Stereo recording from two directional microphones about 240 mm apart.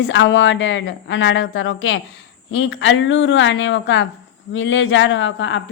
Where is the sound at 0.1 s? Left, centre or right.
Left.